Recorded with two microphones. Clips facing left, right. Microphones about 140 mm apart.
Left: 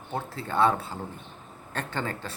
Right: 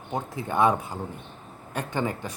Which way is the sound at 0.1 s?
15° right (ahead or behind).